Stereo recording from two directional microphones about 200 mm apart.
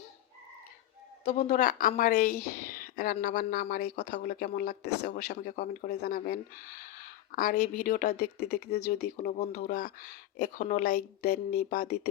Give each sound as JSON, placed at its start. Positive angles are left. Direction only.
{"t": 1.2, "sound": "a woman's voice", "side_deg": 40}
{"t": 8.2, "sound": "a woman's voice", "side_deg": 50}